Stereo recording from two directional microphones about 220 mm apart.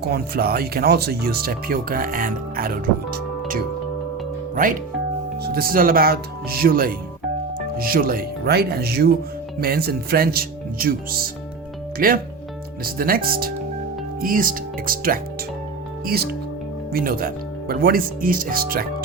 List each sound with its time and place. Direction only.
0.1 s speech: 45° right (ahead or behind)
5.4 s speech: 45° right (ahead or behind)